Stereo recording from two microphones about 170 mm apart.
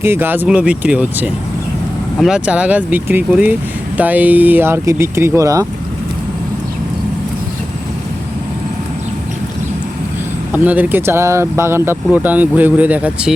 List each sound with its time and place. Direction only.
0.0 s speech: 15° right (ahead or behind)
10.5 s speech: 10° right (ahead or behind)